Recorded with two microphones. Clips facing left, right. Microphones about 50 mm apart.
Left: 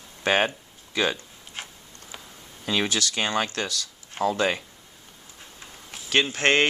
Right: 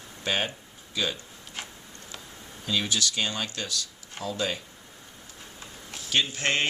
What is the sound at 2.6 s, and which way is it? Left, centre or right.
Speech, left.